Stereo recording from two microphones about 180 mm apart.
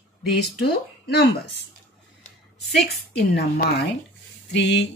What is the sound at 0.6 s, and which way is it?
Speech, 60° left (ahead or behind).